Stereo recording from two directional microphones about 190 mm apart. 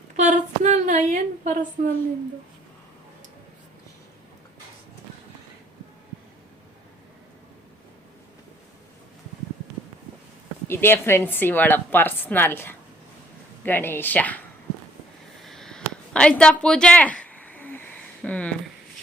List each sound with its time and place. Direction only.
0.2 s a woman's voice: 40° right (ahead or behind)
10.7 s a woman's voice: 10° left (ahead or behind)
15.4 s a sound: centre (ahead or behind)